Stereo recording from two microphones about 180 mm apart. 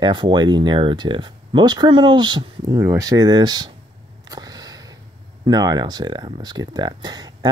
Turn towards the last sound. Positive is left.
turn(degrees=-20)  # may be behind; listen again after turning